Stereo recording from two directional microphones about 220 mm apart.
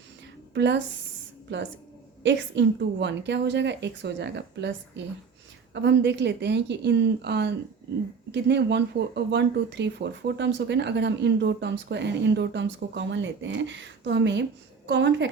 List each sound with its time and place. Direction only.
0.5 s speech: 50° right (ahead or behind)
2.2 s speech: 55° right (ahead or behind)